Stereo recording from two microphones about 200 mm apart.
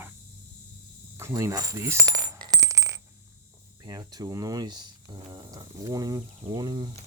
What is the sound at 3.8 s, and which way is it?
Speech, 20° right (ahead or behind).